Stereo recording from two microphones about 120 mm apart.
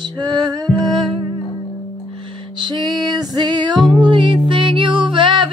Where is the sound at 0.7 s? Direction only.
Centre (ahead or behind).